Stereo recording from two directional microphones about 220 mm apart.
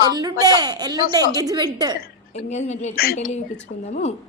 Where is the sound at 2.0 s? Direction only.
30° left (ahead or behind).